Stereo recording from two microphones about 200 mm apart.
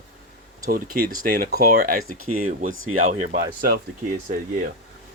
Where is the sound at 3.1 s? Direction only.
40° right (ahead or behind).